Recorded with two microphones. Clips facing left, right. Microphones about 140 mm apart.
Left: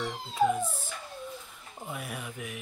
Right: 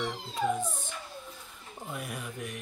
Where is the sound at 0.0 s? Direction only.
Centre (ahead or behind).